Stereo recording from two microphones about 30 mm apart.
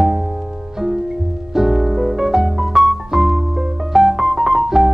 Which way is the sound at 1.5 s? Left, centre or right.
Centre.